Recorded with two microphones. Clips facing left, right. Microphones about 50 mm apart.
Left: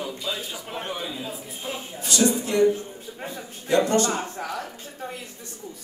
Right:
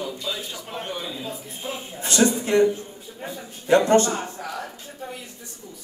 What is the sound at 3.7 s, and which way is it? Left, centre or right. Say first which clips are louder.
Speech: right 4 dB; right.